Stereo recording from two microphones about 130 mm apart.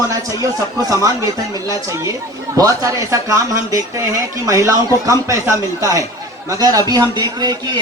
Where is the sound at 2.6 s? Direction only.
25° right (ahead or behind).